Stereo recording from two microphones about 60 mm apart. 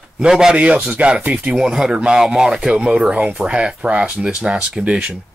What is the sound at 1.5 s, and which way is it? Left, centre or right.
Speech, centre.